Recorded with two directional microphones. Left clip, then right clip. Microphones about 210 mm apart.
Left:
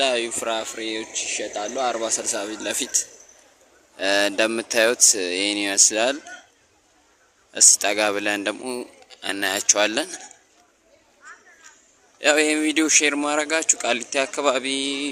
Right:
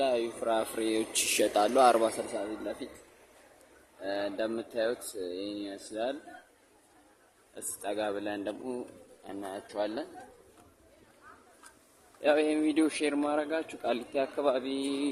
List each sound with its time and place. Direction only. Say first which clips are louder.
0.0 s speech: left 7 dB; 5° left (ahead or behind); by 1.0 s 15° right (ahead or behind)
1.1 s speech: even; 30° right (ahead or behind)
4.0 s speech: left 13 dB; 15° left (ahead or behind)
7.5 s speech: left 18 dB; 15° left (ahead or behind)
12.2 s speech: left 8 dB; 10° left (ahead or behind)